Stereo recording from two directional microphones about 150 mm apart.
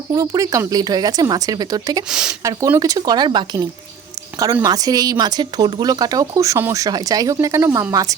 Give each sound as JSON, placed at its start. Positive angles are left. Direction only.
{"t": 0.1, "sound": "speech", "side_deg": -25}
{"t": 2.0, "sound": "speech", "side_deg": -5}
{"t": 2.4, "sound": "speech", "side_deg": -20}